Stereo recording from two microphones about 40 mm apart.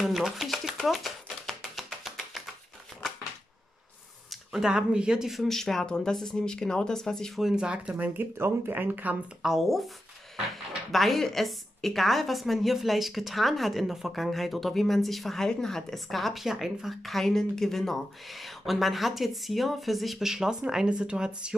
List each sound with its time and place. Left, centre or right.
0.0 s speech: centre
0.5 s music: centre
4.5 s speech: centre
5.3 s speech: centre
5.6 s speech: centre
7.5 s speech: right
8.2 s speech: right
8.7 s speech: right
9.4 s speech: centre
10.9 s speech: centre
20.8 s speech: right